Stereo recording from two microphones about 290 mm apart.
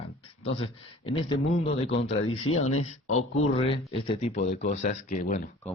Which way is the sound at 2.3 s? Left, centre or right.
Left.